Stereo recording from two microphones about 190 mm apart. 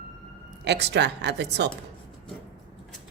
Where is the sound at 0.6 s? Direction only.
60° right (ahead or behind).